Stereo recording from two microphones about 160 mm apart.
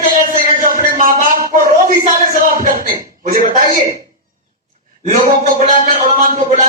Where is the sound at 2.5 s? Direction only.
65° right (ahead or behind).